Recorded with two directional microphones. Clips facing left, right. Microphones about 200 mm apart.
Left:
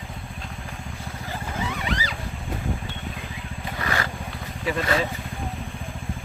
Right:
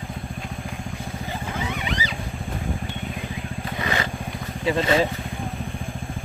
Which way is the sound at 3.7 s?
20° right (ahead or behind).